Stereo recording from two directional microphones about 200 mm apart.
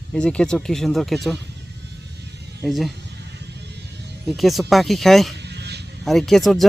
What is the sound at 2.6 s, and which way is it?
Speech, centre (ahead or behind).